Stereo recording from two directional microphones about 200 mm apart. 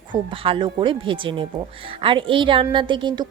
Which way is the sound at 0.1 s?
25° right (ahead or behind).